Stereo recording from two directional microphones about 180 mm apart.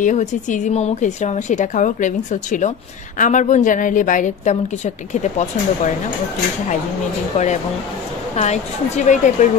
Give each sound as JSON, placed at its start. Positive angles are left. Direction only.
{"t": 0.0, "sound": "a woman's voice", "side_deg": 40}
{"t": 7.3, "sound": "a woman's voice", "side_deg": 40}